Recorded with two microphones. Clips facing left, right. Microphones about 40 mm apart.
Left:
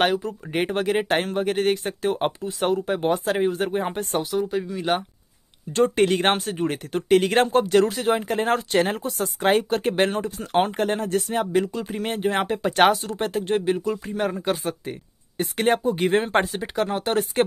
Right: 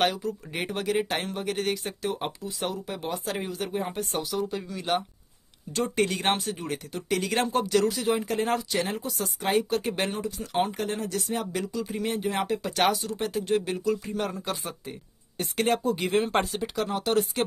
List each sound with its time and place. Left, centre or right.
0.0 s speech: left
4.4 s speech: centre
4.6 s speech: left
14.3 s speech: left
15.7 s speech: left
16.3 s speech: left